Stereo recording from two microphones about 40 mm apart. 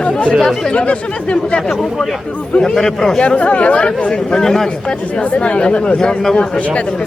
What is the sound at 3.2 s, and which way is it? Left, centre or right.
Speech, left.